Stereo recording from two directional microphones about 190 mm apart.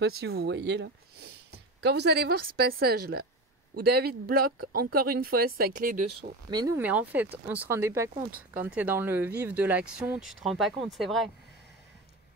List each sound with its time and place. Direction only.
0.0 s speech: 60° right (ahead or behind)
6.5 s speech: 20° right (ahead or behind)
6.8 s speech: 10° right (ahead or behind)